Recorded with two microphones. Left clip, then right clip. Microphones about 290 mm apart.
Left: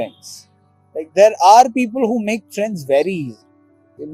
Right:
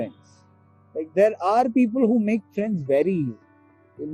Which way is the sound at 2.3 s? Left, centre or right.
Left.